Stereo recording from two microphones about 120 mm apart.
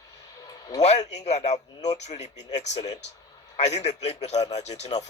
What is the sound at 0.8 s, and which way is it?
A man's voice, 65° left (ahead or behind).